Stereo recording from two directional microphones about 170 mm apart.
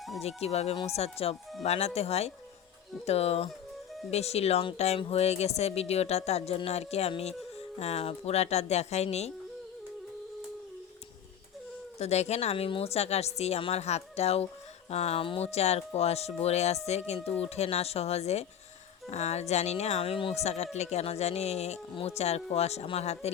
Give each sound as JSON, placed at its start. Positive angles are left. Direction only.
{"t": 0.2, "sound": "speech", "side_deg": 40}
{"t": 11.9, "sound": "speech", "side_deg": 40}